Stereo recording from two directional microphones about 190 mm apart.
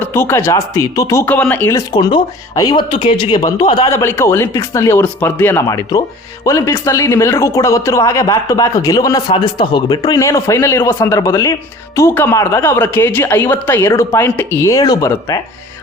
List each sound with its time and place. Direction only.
0.0 s speech: 15° left (ahead or behind)
1.9 s speech: 20° left (ahead or behind)